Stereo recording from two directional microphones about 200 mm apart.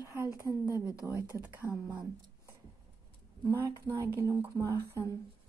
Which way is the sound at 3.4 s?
20° right (ahead or behind).